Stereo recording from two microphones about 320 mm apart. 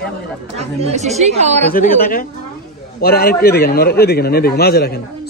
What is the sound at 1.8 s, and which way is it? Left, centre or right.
A man's voice, left.